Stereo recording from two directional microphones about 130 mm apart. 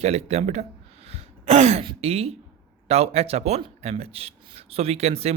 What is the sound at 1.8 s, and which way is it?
Speech, 45° right (ahead or behind).